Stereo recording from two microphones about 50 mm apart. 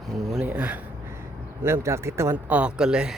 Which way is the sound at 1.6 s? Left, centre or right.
Right.